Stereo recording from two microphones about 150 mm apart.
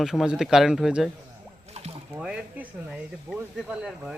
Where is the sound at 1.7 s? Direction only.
45° right (ahead or behind).